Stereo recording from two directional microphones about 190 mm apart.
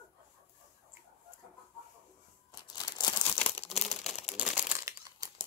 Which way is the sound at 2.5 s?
20° left (ahead or behind).